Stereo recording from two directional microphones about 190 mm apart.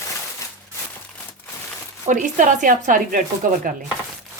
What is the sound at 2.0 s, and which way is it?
Speech, 40° right (ahead or behind).